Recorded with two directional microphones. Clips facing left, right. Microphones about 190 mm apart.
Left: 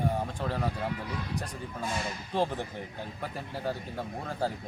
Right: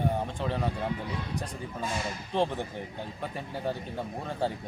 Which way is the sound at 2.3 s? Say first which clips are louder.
Right 1 dB; centre (ahead or behind).